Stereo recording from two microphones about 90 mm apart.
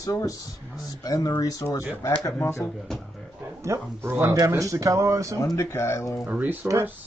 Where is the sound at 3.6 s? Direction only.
30° right (ahead or behind).